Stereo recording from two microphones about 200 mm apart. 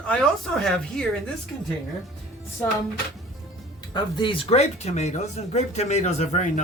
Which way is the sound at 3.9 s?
25° left (ahead or behind).